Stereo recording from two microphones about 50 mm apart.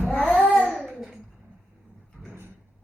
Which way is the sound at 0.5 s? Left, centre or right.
Centre.